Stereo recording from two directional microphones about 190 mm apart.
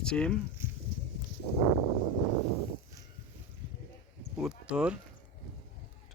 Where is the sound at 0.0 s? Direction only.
5° left (ahead or behind).